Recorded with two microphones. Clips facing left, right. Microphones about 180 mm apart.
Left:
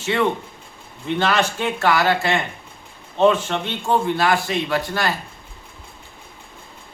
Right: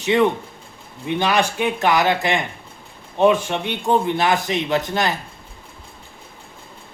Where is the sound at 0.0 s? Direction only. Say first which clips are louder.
Right 3 dB; 15° right (ahead or behind).